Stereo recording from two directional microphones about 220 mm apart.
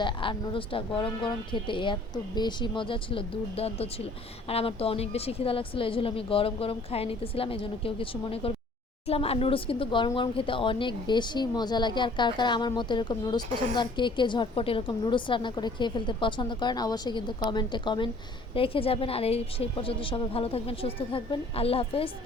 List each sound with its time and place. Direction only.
0.0 s speech: 20° left (ahead or behind)